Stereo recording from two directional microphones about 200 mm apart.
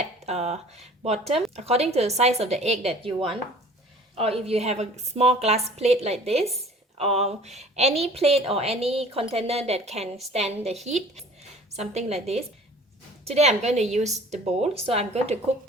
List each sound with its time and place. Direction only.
0.0 s speech: 30° right (ahead or behind)
1.2 s speech: centre (ahead or behind)
1.5 s a woman's voice: 30° right (ahead or behind)